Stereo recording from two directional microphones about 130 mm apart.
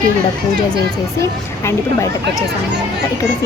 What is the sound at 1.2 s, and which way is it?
A woman's voice, 20° left (ahead or behind).